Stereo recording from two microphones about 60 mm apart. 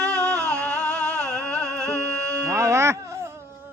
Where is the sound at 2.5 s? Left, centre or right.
Right.